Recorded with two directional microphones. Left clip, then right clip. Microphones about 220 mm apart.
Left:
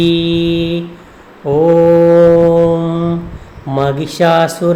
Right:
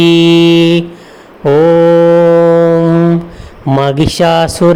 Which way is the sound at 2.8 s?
25° right (ahead or behind).